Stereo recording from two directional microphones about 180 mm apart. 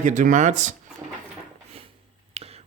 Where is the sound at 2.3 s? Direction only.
35° right (ahead or behind).